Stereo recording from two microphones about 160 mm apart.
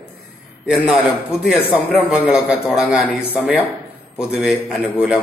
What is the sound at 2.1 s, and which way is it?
A man's voice, 5° right (ahead or behind).